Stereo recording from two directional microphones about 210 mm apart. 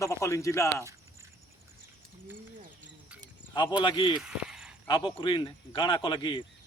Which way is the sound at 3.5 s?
20° left (ahead or behind).